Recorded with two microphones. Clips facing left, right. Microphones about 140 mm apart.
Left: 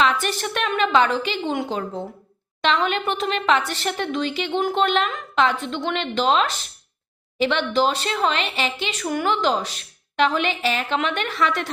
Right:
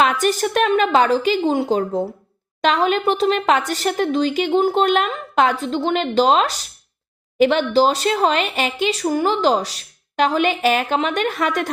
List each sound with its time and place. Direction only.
0.0 s speech: 40° right (ahead or behind)